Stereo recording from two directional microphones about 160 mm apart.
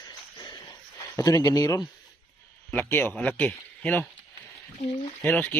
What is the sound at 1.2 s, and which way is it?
Speech, 25° left (ahead or behind).